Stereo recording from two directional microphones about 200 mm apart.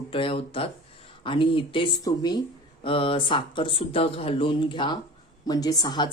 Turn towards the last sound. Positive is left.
turn(degrees=20)  # may be behind; listen again after turning